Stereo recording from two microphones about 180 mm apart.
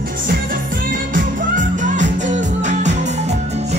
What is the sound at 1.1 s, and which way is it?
Music, 45° right (ahead or behind).